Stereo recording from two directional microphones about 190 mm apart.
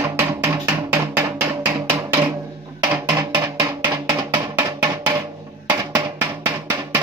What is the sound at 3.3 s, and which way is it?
Music, 20° right (ahead or behind).